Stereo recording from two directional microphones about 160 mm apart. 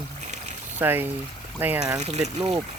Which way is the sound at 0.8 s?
15° right (ahead or behind).